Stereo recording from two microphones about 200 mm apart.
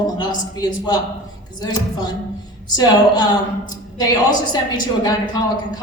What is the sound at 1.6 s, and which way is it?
A woman's voice, 20° left (ahead or behind).